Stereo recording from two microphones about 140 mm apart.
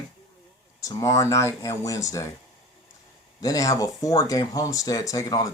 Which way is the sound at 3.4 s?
25° left (ahead or behind).